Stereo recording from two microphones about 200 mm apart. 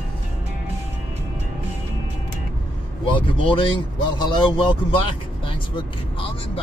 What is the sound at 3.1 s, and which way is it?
Speech, 25° left (ahead or behind).